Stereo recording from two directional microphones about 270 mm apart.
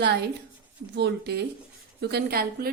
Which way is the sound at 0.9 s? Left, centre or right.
Right.